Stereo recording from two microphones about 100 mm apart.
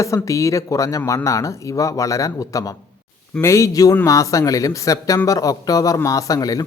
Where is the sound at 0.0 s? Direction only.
30° left (ahead or behind).